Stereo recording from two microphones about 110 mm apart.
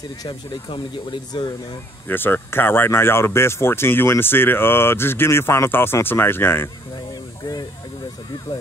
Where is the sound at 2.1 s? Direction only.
20° left (ahead or behind).